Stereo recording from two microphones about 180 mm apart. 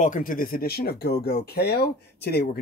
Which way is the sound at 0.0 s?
45° left (ahead or behind).